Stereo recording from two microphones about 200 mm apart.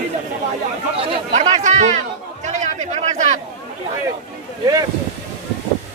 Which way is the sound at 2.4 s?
35° right (ahead or behind).